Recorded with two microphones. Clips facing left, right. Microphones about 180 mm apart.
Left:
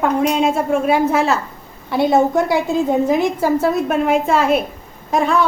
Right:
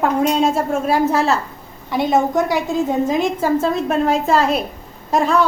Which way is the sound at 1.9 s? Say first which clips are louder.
Left 2 dB; 20° right (ahead or behind).